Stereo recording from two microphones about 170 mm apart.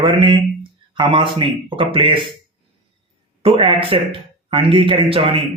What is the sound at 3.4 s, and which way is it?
A man's voice, 35° right (ahead or behind).